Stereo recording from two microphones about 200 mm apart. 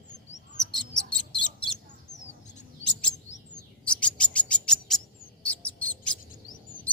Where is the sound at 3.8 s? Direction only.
5° left (ahead or behind).